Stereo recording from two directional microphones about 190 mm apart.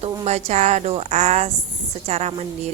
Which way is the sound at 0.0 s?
35° right (ahead or behind).